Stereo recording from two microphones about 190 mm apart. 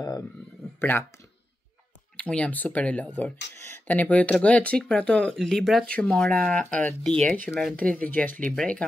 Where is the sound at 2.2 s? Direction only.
5° left (ahead or behind).